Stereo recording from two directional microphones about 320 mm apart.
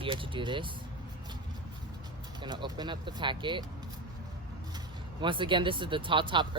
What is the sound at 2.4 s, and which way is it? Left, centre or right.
Speech, centre.